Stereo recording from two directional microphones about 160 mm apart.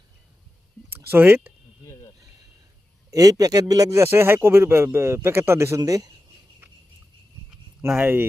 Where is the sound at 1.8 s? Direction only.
20° left (ahead or behind).